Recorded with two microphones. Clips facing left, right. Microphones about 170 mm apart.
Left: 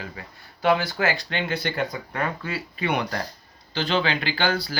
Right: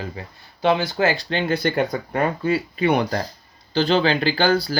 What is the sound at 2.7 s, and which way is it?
Speech, 30° right (ahead or behind).